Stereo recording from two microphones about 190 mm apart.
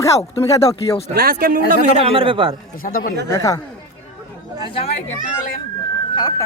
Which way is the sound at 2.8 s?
45° left (ahead or behind).